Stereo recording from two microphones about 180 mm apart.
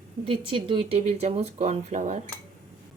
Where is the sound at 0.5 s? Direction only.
30° right (ahead or behind).